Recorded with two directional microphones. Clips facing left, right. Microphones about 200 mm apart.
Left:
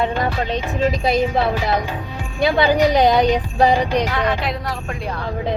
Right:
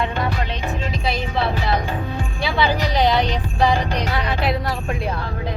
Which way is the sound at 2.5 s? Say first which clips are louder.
Left 6 dB; 45° left (ahead or behind).